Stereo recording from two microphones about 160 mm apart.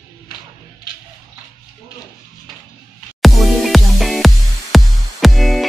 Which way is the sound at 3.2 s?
Centre (ahead or behind).